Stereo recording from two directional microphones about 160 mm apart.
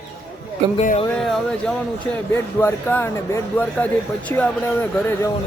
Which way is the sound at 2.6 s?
15° left (ahead or behind).